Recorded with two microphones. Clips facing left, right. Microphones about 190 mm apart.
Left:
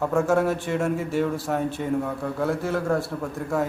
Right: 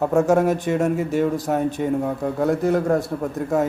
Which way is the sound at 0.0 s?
20° right (ahead or behind).